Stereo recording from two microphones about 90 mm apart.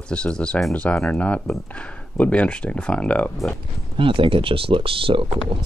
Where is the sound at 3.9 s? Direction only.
70° right (ahead or behind).